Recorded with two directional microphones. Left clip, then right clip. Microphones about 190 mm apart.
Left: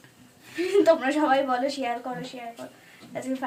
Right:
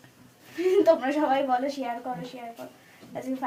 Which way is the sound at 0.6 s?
5° right (ahead or behind).